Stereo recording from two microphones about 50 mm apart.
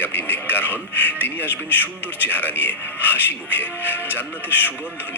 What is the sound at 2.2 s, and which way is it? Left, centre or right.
Speech, left.